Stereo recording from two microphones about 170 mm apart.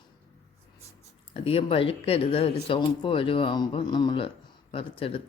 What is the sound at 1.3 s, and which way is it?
Speech, 35° left (ahead or behind).